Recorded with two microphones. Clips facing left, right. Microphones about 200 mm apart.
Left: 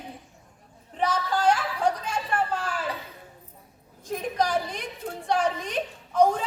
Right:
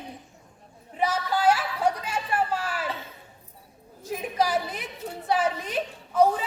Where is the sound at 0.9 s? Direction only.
10° right (ahead or behind).